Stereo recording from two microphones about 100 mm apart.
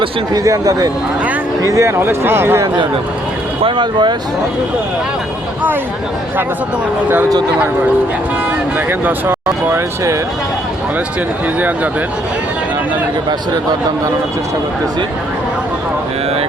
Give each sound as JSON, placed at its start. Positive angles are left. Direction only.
{"t": 0.3, "sound": "speech", "side_deg": -35}
{"t": 3.6, "sound": "speech", "side_deg": -50}
{"t": 8.9, "sound": "speech", "side_deg": -20}